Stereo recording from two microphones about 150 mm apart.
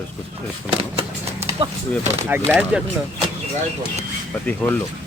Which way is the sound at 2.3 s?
15° right (ahead or behind).